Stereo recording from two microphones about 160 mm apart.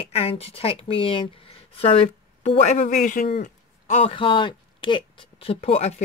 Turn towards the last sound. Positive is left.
turn(degrees=40)  # may be behind; listen again after turning